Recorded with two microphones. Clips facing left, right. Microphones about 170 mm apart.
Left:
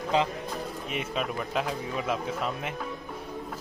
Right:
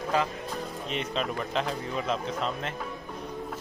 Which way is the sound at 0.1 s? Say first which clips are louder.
Left 2 dB; 20° left (ahead or behind).